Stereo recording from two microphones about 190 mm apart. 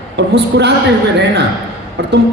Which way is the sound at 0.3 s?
65° right (ahead or behind).